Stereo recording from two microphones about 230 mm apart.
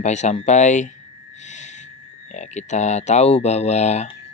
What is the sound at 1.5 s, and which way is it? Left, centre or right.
Snort, left.